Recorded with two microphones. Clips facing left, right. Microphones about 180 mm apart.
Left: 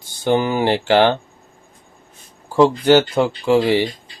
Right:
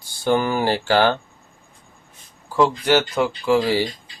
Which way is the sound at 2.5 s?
30° left (ahead or behind).